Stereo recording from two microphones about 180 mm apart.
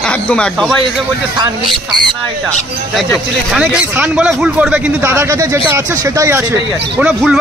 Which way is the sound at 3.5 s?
5° right (ahead or behind).